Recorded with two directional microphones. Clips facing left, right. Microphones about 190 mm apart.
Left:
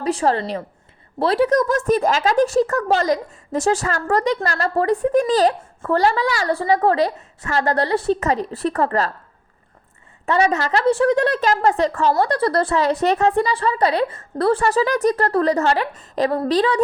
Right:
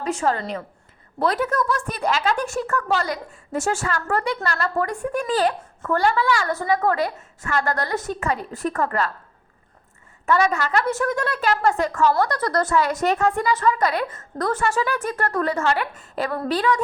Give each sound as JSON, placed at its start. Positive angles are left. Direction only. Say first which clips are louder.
{"t": 0.0, "sound": "speech", "louder": "left 4 dB", "side_deg": 35}
{"t": 10.2, "sound": "speech", "louder": "left 2 dB", "side_deg": 35}